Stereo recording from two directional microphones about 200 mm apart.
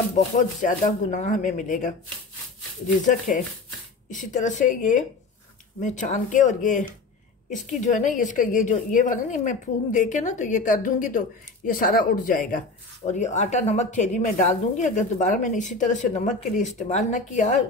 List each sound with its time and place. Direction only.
0.1 s a woman's voice: 40° left (ahead or behind)
3.1 s a woman's voice: 40° left (ahead or behind)